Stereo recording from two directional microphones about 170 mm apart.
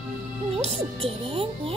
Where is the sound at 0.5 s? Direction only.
40° right (ahead or behind).